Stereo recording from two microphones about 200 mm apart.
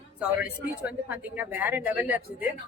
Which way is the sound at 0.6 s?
5° right (ahead or behind).